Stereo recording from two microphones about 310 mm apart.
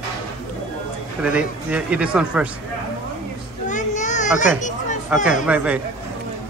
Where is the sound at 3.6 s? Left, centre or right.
Left.